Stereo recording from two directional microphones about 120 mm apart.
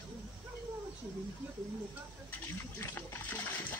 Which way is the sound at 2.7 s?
20° left (ahead or behind).